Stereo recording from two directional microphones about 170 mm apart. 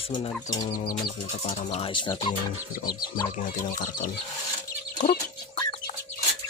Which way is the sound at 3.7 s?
50° left (ahead or behind).